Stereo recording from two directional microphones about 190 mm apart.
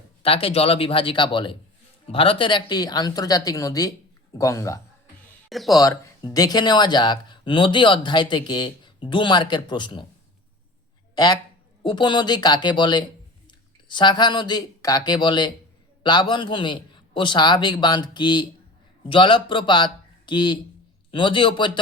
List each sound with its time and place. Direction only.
0.2 s speech: 30° left (ahead or behind)
5.5 s speech: centre (ahead or behind)
5.8 s speech: 20° left (ahead or behind)
11.1 s a sound: 20° left (ahead or behind)
11.8 s speech: 25° left (ahead or behind)